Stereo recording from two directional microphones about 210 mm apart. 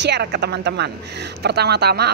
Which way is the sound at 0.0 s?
55° right (ahead or behind).